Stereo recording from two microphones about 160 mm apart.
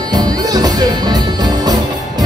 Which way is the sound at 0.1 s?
25° right (ahead or behind).